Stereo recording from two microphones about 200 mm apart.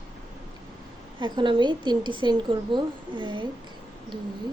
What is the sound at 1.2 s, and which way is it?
A woman's voice, 25° right (ahead or behind).